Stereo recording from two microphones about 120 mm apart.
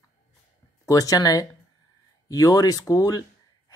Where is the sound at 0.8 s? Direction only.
30° left (ahead or behind).